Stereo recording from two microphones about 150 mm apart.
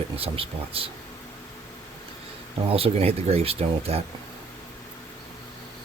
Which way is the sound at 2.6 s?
40° right (ahead or behind).